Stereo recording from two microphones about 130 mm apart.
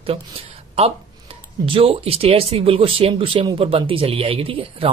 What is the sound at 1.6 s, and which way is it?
Speech, 45° right (ahead or behind).